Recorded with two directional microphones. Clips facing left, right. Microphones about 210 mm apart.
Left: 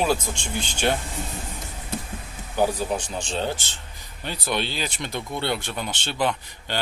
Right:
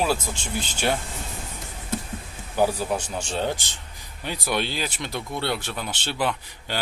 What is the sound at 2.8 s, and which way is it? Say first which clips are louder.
Speech: even; 10° right (ahead or behind).